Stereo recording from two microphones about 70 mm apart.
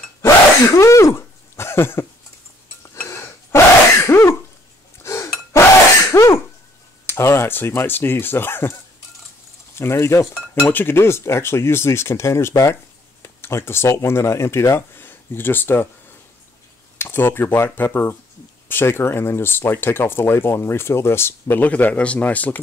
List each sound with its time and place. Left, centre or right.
0.2 s sneeze: left
3.1 s sneeze: left
5.0 s a sound: left
5.5 s sneeze: left
7.1 s speech: left
9.8 s speech: left
10.5 s speech: left